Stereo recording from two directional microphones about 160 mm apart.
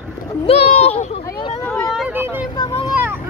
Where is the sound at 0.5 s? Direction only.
40° left (ahead or behind).